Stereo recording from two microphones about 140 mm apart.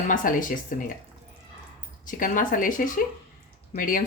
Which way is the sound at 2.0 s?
70° left (ahead or behind).